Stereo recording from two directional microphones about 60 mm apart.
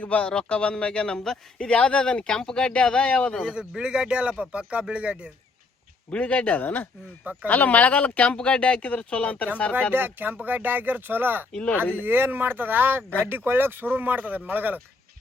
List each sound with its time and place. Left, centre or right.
0.0 s a man's voice: left
3.4 s speech: centre
6.1 s speech: left
9.9 s speech: right